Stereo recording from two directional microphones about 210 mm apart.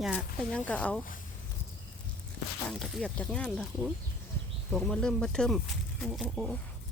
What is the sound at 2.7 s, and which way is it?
Speech, centre (ahead or behind).